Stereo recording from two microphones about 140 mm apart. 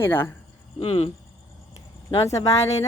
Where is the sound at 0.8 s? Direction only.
45° left (ahead or behind).